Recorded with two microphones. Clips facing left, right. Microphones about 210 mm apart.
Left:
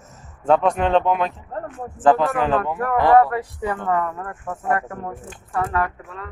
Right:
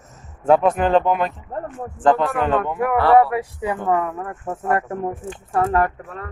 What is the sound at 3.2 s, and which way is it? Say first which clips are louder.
Speech: right 1 dB; 15° right (ahead or behind).